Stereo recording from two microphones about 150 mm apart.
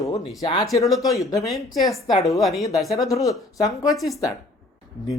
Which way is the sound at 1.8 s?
Centre (ahead or behind).